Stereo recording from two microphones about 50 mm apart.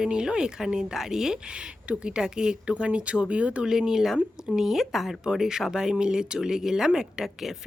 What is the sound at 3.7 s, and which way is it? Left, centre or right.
Speech, centre.